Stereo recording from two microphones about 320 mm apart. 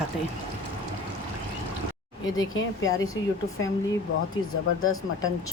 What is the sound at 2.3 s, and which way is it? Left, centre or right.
Speech, left.